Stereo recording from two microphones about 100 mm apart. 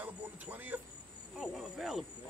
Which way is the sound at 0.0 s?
15° right (ahead or behind).